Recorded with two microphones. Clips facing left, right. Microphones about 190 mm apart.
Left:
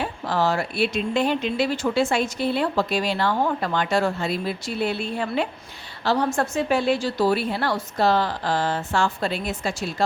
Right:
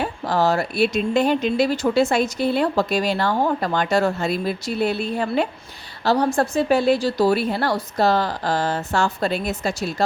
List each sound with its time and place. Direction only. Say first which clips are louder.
0.0 s speech: right 3 dB; 40° right (ahead or behind)